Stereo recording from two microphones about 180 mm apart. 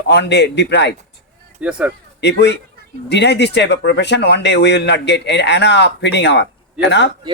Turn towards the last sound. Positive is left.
turn(degrees=75)  # may be behind; listen again after turning